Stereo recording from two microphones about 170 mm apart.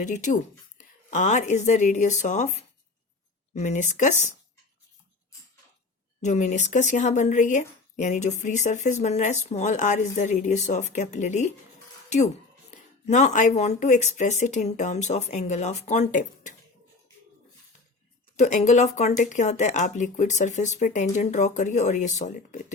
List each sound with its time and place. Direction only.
0.0 s speech: 45° left (ahead or behind)
6.2 s speech: 45° left (ahead or behind)
18.3 s speech: 45° left (ahead or behind)